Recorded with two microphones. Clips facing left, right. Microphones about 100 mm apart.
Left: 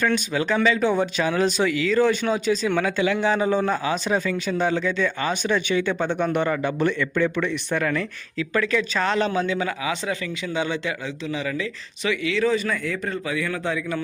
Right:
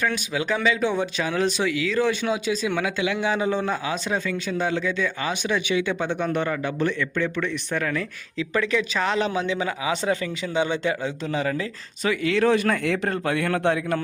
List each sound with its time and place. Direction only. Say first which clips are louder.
0.0 s speech: left 3 dB; 5° right (ahead or behind)
6.1 s speech: left 2 dB; 10° left (ahead or behind)
8.4 s a man's voice: left 1 dB; 15° right (ahead or behind)
11.3 s speech: right 1 dB; 40° right (ahead or behind); by 14.0 s 55° right (ahead or behind)